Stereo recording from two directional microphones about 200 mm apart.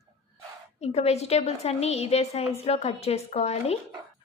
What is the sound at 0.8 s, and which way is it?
A woman's voice, 30° left (ahead or behind).